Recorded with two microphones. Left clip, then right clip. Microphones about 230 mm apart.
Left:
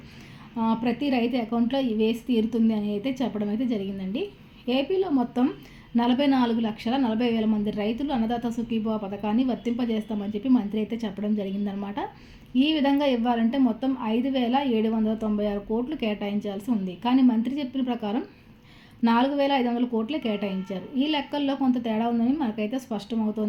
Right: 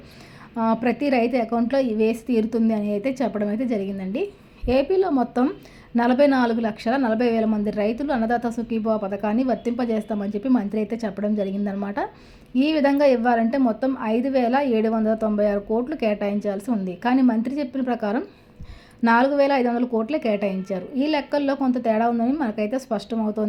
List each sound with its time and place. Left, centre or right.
0.5 s a woman's voice: centre